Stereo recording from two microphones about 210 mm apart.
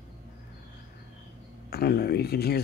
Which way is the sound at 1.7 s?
50° left (ahead or behind).